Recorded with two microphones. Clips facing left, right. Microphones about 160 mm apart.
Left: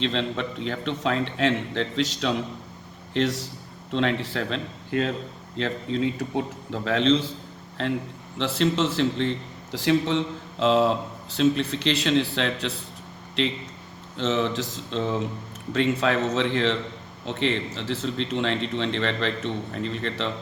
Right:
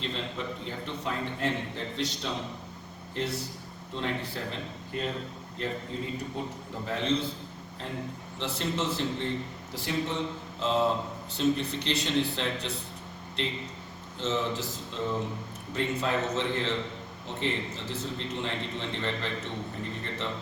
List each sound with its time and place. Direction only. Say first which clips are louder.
0.0 s a man's voice: left 8 dB; 90° left
14.2 s a man's voice: left 6 dB; 85° left